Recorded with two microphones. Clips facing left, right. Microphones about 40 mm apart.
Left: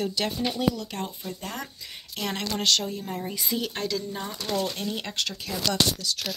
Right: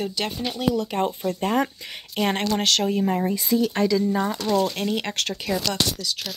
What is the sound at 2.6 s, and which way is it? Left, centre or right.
Speech, right.